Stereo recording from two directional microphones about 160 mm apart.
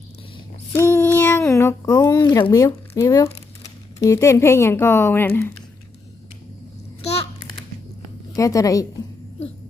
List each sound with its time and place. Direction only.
0.8 s a sound: 15° left (ahead or behind)
3.6 s speech: 20° left (ahead or behind)
8.4 s a woman's voice: 20° left (ahead or behind)